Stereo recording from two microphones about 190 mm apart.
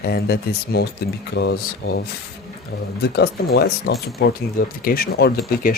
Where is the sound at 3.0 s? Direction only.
60° left (ahead or behind).